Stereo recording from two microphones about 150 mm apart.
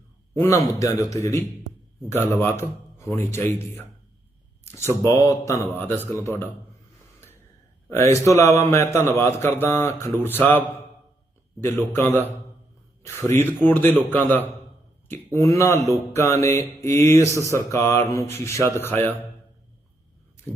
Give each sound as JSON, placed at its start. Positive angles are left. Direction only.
{"t": 0.3, "sound": "a man's voice", "side_deg": 20}
{"t": 7.9, "sound": "a man's voice", "side_deg": 20}
{"t": 11.6, "sound": "a man's voice", "side_deg": 15}